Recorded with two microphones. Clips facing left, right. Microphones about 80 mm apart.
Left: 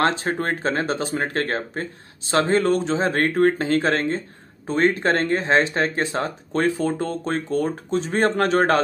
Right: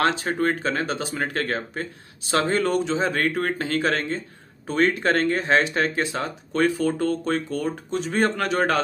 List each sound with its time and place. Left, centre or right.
0.0 s speech: left